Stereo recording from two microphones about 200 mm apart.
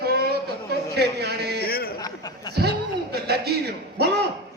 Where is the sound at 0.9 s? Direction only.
55° right (ahead or behind).